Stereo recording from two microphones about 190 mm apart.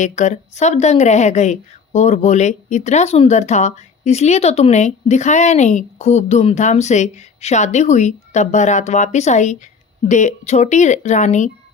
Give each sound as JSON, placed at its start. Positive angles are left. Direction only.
{"t": 0.0, "sound": "speech", "side_deg": 40}